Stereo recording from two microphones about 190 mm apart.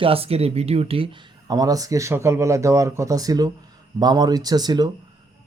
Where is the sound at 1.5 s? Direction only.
20° right (ahead or behind).